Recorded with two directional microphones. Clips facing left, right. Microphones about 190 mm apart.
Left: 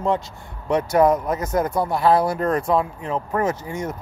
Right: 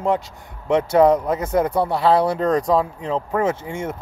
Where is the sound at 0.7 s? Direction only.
30° right (ahead or behind).